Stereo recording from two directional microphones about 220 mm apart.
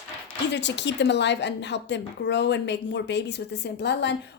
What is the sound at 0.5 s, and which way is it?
A woman's voice, 55° left (ahead or behind).